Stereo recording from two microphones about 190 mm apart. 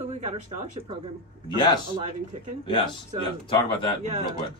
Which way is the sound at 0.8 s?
30° right (ahead or behind).